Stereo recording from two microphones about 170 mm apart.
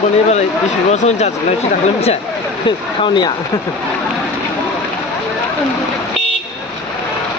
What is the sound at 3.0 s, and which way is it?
Speech, 30° left (ahead or behind).